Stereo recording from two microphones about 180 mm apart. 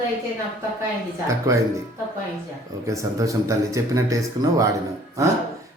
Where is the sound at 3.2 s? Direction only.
15° right (ahead or behind).